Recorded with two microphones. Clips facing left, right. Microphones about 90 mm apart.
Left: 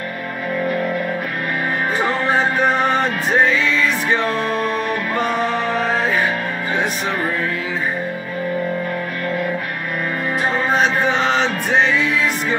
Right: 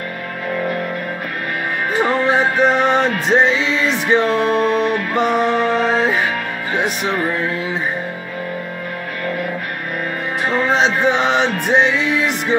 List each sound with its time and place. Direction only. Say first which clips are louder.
2.0 s music: right 3 dB; 20° right (ahead or behind)
10.7 s music: right 2 dB; 20° right (ahead or behind)